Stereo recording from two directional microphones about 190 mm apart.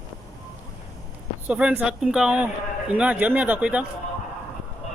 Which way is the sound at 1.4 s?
5° right (ahead or behind).